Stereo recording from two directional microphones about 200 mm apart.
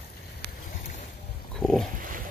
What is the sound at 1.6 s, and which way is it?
Pig, centre (ahead or behind).